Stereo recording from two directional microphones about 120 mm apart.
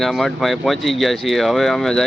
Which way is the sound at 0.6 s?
Centre (ahead or behind).